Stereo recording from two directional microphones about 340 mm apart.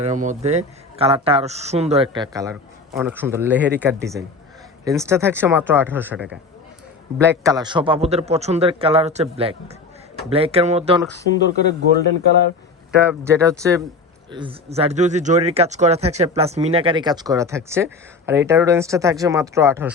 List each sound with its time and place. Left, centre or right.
0.0 s speech: right
11.3 s speech: left
13.0 s speech: centre